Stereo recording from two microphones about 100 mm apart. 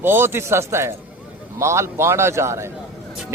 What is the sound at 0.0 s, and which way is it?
Speech, 20° right (ahead or behind).